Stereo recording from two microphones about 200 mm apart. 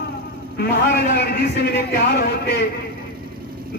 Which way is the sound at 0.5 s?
55° left (ahead or behind).